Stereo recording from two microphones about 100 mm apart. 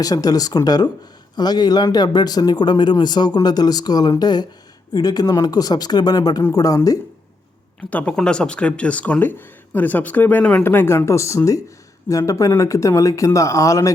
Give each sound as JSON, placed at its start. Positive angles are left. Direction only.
{"t": 0.0, "sound": "speech", "side_deg": 40}
{"t": 7.9, "sound": "speech", "side_deg": 15}